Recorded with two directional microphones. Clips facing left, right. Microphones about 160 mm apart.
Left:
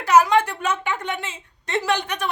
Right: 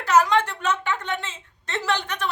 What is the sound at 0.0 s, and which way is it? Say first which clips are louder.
A woman's voice: left 3 dB; 10° left (ahead or behind).